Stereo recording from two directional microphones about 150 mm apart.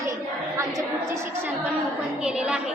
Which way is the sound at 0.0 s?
20° right (ahead or behind).